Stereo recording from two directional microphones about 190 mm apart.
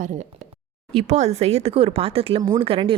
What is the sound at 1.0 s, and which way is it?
Speech, 35° right (ahead or behind).